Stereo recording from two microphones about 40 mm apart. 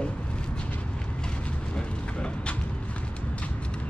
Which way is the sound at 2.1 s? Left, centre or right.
Left.